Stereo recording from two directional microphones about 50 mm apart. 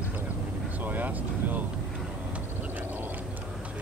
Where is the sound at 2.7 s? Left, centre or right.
Right.